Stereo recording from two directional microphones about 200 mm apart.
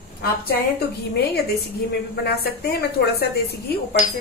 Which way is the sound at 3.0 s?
55° left (ahead or behind).